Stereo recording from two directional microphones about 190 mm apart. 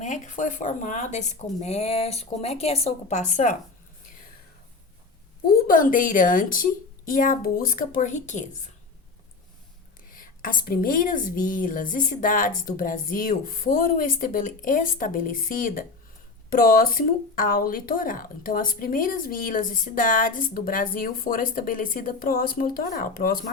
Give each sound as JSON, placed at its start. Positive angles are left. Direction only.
{"t": 0.0, "sound": "speech", "side_deg": 40}
{"t": 5.6, "sound": "speech", "side_deg": 45}
{"t": 10.1, "sound": "speech", "side_deg": 45}